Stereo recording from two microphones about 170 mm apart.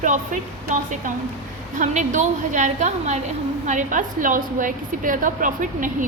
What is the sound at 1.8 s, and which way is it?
A woman's voice, 45° right (ahead or behind).